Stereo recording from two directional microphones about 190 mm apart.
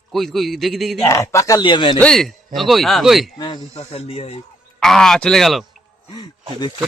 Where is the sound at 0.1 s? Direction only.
Centre (ahead or behind).